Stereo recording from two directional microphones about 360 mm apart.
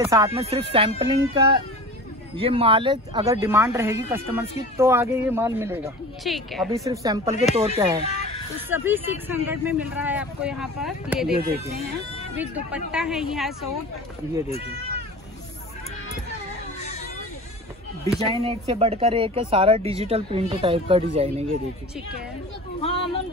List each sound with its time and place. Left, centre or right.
0.0 s speech: centre
11.6 s speech: centre
12.4 s speech: centre
18.3 s speech: centre
22.8 s speech: centre